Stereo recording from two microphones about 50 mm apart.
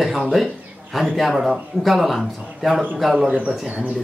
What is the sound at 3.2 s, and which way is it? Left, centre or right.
Speech, right.